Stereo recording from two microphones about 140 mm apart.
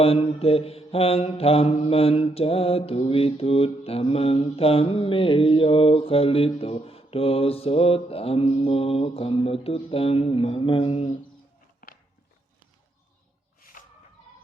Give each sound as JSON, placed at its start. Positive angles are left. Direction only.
{"t": 0.0, "sound": "mantra", "side_deg": 45}
{"t": 11.8, "sound": "walk", "side_deg": 90}